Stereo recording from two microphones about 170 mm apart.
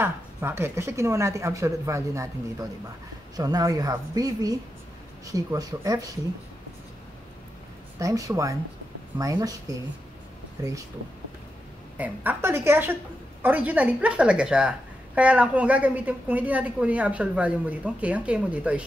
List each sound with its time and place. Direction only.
0.0 s a woman's voice: 15° right (ahead or behind)
8.0 s a woman's voice: 20° right (ahead or behind)
10.6 s a woman's voice: 20° right (ahead or behind)
12.0 s a woman's voice: 10° right (ahead or behind)